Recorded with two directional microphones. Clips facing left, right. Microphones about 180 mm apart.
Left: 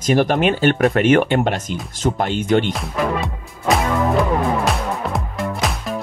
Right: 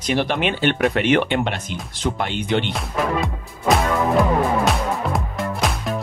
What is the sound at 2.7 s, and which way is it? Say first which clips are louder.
Music: left 1 dB; centre (ahead or behind).